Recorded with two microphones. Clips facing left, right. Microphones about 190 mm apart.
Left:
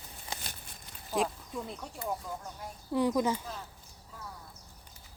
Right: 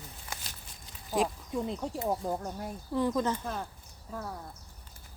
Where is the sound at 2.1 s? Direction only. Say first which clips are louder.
Right 5 dB; 45° right (ahead or behind).